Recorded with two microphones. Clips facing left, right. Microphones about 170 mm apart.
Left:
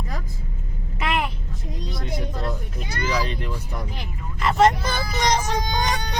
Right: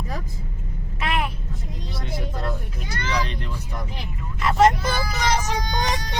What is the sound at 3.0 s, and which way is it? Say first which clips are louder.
Vehicle: left 2 dB; 10° left (ahead or behind).